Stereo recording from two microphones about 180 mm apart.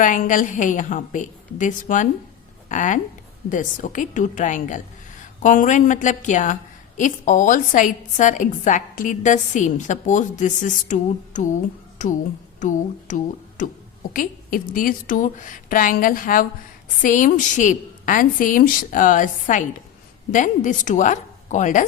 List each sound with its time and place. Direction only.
0.0 s a woman's voice: 45° left (ahead or behind)